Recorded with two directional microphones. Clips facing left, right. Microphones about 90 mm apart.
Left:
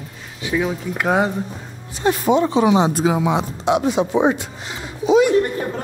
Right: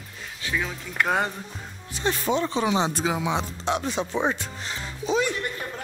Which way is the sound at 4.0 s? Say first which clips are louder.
Left 9 dB; 90° left.